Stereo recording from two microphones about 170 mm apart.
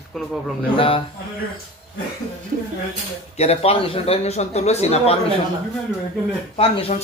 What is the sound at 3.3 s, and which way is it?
A man's voice, 40° left (ahead or behind).